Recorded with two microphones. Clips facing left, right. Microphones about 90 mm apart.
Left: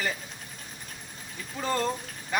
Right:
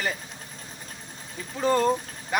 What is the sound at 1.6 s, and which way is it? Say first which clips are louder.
Speech: right 6 dB; 15° right (ahead or behind).